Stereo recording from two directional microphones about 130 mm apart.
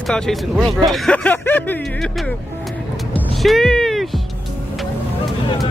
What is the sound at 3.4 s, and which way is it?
Speech, centre (ahead or behind).